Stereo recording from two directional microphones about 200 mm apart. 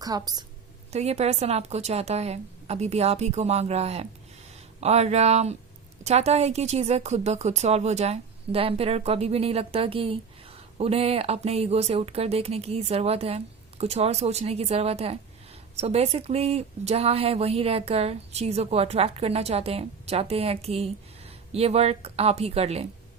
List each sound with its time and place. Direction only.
0.0 s a woman's voice: 20° right (ahead or behind)
0.9 s a woman's voice: 35° right (ahead or behind)